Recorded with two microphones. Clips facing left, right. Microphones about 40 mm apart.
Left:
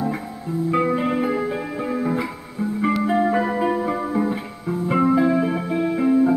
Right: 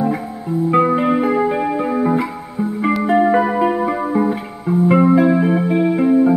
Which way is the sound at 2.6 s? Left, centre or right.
Right.